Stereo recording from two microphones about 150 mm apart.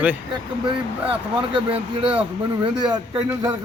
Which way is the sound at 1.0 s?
35° right (ahead or behind).